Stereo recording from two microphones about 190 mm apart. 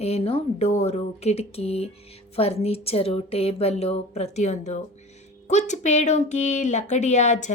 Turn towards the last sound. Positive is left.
turn(degrees=35)  # may be behind; listen again after turning